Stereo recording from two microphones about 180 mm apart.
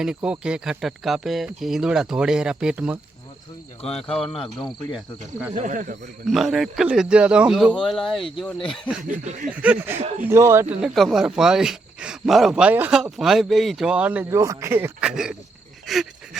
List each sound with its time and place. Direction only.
0.0 s speech: 5° right (ahead or behind)
4.2 s speech: centre (ahead or behind)
5.5 s speech: 45° right (ahead or behind)
6.2 s speech: centre (ahead or behind)
9.0 s speech: 45° right (ahead or behind)
9.5 s speech: 10° right (ahead or behind)
10.0 s speech: 35° right (ahead or behind)
10.2 s speech: 15° right (ahead or behind)
10.8 s speech: centre (ahead or behind)
15.9 s a sound: centre (ahead or behind)